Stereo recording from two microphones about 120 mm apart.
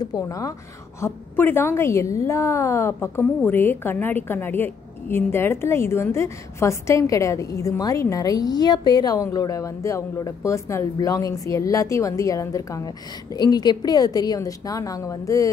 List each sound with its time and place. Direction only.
0.0 s a woman's voice: 30° left (ahead or behind)